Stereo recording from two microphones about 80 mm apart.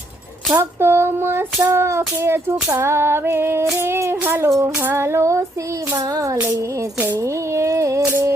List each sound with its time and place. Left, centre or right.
0.5 s child singing: right
7.5 s music: right